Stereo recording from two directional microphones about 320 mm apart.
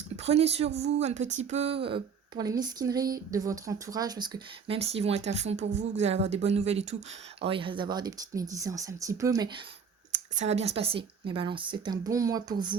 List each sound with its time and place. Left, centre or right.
0.2 s speech: centre